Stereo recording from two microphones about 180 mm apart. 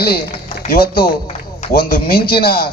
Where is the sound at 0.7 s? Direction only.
55° left (ahead or behind).